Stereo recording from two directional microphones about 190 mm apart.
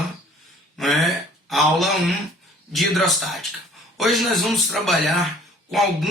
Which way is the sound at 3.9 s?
Centre (ahead or behind).